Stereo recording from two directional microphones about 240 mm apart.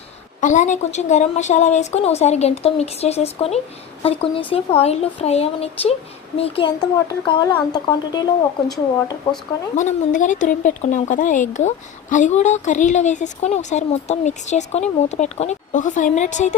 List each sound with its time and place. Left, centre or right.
0.4 s a child's voice: left; by 9.1 s centre
9.7 s speech: left